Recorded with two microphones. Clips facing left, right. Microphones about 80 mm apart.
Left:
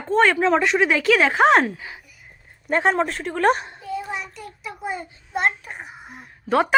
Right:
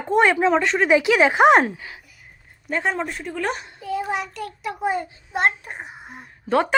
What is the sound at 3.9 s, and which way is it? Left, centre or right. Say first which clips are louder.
Child singing: right 4 dB; right.